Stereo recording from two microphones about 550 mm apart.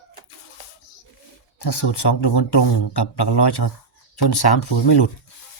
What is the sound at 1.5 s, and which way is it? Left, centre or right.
Speech, left.